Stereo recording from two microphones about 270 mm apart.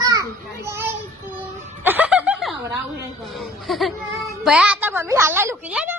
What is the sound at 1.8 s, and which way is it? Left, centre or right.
Snicker, centre.